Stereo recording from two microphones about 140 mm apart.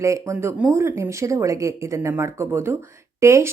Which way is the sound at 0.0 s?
20° right (ahead or behind).